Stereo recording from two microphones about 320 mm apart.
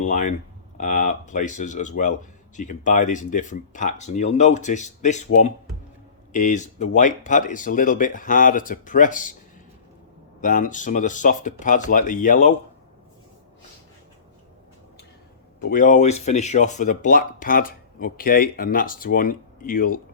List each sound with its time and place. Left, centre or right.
0.0 s speech: left
10.4 s speech: left
15.7 s speech: left